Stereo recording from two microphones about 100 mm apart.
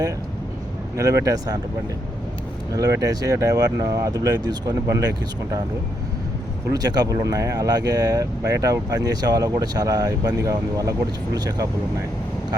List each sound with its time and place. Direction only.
0.9 s speech: 30° right (ahead or behind)
2.7 s speech: 35° right (ahead or behind)
6.7 s speech: 40° right (ahead or behind)